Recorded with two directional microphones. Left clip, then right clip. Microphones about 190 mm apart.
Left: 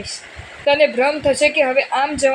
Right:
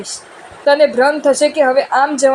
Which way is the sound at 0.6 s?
25° right (ahead or behind).